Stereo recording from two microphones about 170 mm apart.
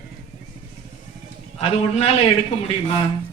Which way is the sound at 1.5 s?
35° left (ahead or behind).